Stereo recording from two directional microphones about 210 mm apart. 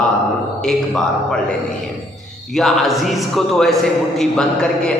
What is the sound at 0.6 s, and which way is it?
Speech, centre (ahead or behind).